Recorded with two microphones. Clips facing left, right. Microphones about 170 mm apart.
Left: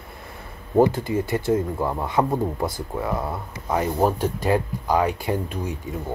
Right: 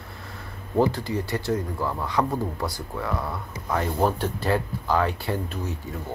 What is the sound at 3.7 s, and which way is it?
Speech, 10° left (ahead or behind).